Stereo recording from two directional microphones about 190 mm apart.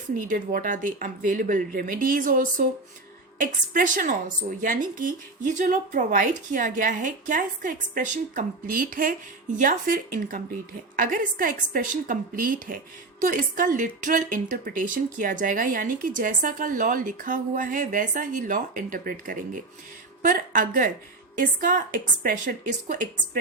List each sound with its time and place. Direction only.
0.2 s a woman's voice: 45° right (ahead or behind)